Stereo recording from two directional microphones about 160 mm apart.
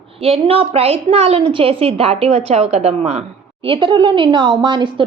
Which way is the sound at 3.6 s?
30° right (ahead or behind).